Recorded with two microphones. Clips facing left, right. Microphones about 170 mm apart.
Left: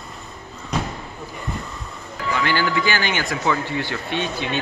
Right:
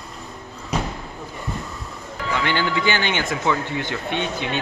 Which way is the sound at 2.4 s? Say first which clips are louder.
Even; 20° right (ahead or behind).